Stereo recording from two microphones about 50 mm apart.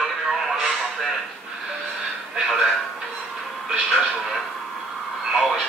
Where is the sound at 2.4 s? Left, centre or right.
Centre.